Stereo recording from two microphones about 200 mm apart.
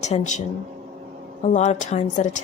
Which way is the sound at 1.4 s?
35° left (ahead or behind).